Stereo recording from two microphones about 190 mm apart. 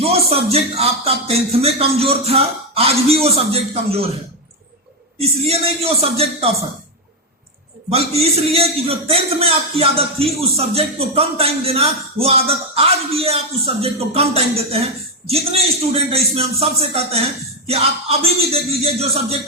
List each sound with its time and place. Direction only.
0.0 s a man's voice: 30° right (ahead or behind)
5.2 s a man's voice: 30° right (ahead or behind)
7.9 s a man's voice: 30° right (ahead or behind)